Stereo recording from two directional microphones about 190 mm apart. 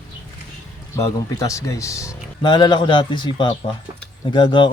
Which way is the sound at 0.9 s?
15° left (ahead or behind).